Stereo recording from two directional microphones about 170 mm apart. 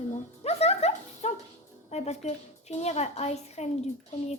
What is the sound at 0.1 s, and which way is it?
Dog, 40° left (ahead or behind).